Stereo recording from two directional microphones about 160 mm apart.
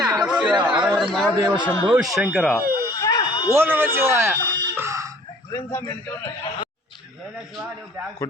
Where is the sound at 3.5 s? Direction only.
15° right (ahead or behind).